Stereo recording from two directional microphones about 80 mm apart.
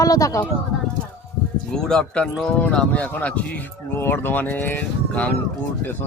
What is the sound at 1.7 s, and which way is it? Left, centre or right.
Speech, centre.